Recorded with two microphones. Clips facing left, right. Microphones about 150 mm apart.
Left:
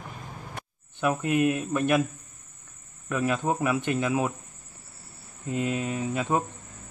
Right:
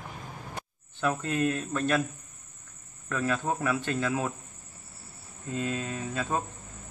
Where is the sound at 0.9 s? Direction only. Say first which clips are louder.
Left 4 dB; 15° left (ahead or behind).